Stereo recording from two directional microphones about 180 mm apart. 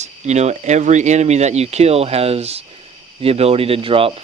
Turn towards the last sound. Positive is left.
turn(degrees=-30)  # may be behind; listen again after turning